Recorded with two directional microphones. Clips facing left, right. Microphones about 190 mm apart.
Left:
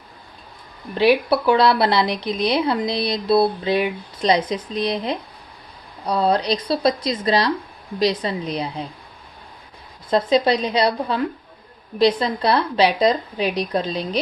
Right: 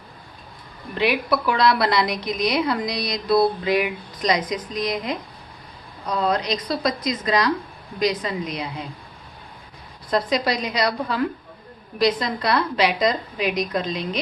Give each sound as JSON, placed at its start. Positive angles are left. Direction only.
{"t": 0.9, "sound": "a woman's voice", "side_deg": 30}
{"t": 10.1, "sound": "a woman's voice", "side_deg": 25}